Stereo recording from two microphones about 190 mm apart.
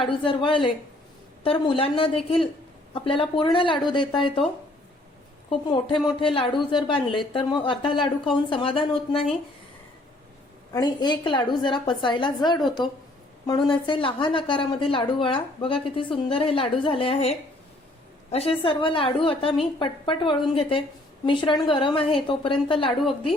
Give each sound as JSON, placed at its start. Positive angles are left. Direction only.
{"t": 0.1, "sound": "speech", "side_deg": 25}
{"t": 5.5, "sound": "speech", "side_deg": 25}
{"t": 10.7, "sound": "speech", "side_deg": 20}